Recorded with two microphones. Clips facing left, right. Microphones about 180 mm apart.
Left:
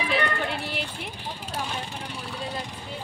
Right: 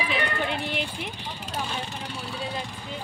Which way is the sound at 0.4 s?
5° left (ahead or behind).